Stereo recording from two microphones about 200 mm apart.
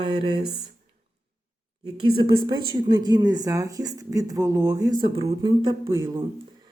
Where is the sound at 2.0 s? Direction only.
25° right (ahead or behind).